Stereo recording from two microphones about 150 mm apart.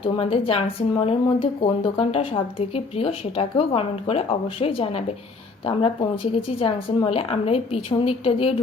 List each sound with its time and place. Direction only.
0.0 s speech: 35° left (ahead or behind)